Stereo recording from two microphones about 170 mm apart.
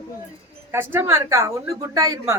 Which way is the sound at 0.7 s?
15° right (ahead or behind).